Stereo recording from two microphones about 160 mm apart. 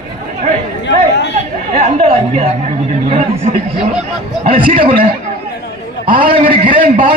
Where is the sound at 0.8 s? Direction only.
90° left.